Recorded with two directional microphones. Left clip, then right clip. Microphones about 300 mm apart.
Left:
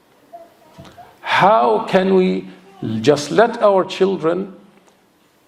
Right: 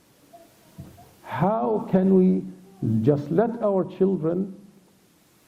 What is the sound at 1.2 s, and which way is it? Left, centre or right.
A man's voice, centre.